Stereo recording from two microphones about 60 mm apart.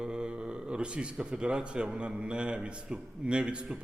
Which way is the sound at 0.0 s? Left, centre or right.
Centre.